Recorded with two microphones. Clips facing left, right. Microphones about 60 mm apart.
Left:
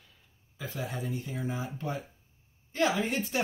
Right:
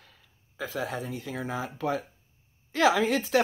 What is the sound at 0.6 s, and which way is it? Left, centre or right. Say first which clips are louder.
Speech: right 4 dB; right.